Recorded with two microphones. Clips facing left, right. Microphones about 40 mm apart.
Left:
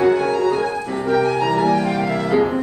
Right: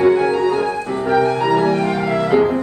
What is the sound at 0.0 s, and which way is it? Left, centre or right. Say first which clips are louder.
Music: right 2 dB; centre.